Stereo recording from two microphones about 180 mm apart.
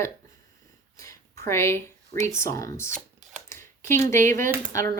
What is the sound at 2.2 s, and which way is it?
Speech, 15° left (ahead or behind).